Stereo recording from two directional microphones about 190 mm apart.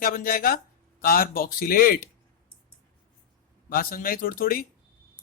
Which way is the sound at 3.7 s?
50° left (ahead or behind).